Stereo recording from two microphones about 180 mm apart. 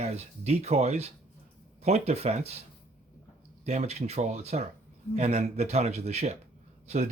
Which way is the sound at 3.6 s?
40° right (ahead or behind).